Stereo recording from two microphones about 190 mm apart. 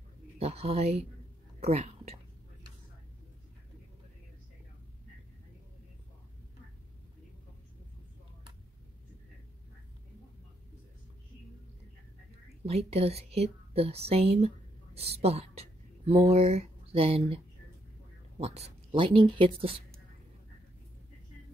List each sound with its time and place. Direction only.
0.4 s speech: 30° right (ahead or behind)
12.6 s speech: 30° right (ahead or behind)
18.4 s speech: 35° right (ahead or behind)